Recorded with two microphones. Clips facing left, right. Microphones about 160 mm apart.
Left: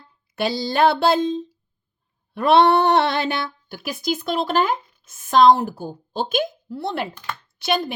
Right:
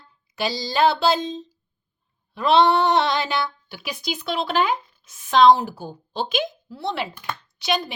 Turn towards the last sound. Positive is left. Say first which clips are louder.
# left 2 dB
turn(degrees=50)  # may be behind; listen again after turning